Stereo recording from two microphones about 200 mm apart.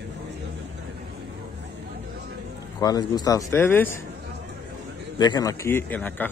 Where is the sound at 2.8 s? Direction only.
20° left (ahead or behind).